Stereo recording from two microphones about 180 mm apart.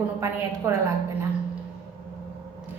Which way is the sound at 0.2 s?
15° right (ahead or behind).